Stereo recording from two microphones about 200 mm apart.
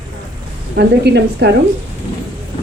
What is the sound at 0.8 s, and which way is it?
Speech, 55° right (ahead or behind).